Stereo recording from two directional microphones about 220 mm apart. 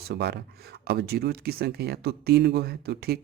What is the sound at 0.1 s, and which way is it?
Speech, 50° right (ahead or behind).